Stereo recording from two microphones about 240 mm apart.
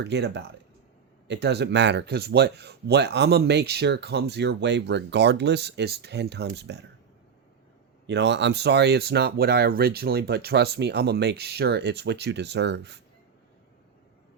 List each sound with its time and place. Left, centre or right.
0.0 s speech: right
8.0 s speech: right